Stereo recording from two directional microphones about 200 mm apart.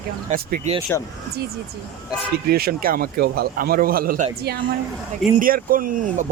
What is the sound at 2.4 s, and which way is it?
A man's voice, 50° right (ahead or behind).